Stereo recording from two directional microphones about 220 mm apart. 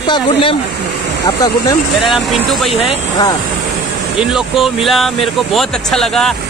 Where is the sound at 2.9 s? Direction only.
20° left (ahead or behind).